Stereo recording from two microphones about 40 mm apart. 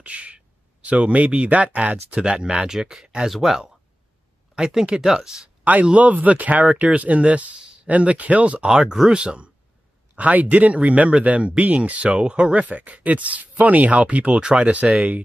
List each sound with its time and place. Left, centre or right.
0.0 s speech: right
2.3 s speech: centre
4.9 s speech: centre
5.6 s a man's voice: right
8.6 s speech: centre
9.2 s speech: right
10.1 s speech: right